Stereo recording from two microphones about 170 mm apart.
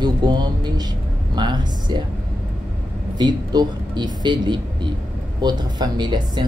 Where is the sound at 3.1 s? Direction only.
25° right (ahead or behind).